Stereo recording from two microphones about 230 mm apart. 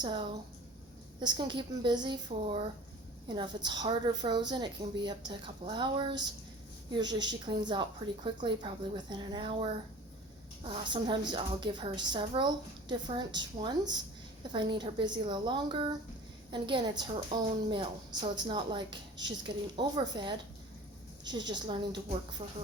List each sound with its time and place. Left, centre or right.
0.0 s a woman's voice: centre